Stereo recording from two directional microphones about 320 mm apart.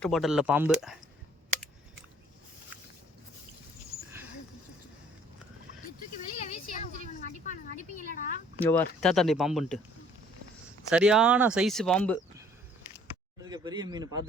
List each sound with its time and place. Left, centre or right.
0.0 s speech: centre
6.4 s a sound: left
8.6 s speech: centre
10.8 s speech: centre
13.4 s speech: centre